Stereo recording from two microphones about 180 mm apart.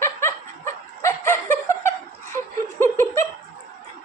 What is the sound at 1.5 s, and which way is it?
Chuckle, 15° left (ahead or behind).